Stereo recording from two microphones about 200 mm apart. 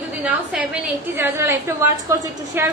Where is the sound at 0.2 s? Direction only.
5° right (ahead or behind).